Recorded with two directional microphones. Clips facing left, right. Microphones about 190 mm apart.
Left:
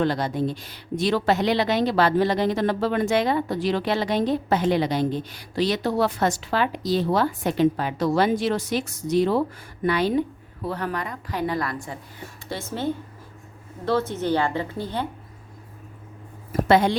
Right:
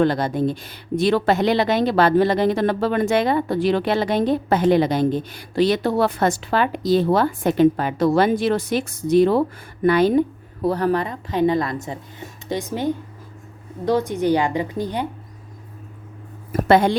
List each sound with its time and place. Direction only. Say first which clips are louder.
0.0 s a woman's voice: right 4 dB; 50° right (ahead or behind); by 15.0 s 15° right (ahead or behind)
16.5 s a woman's voice: right 3 dB; 50° right (ahead or behind)